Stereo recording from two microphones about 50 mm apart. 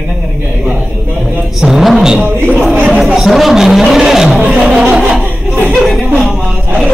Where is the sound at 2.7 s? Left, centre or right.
Right.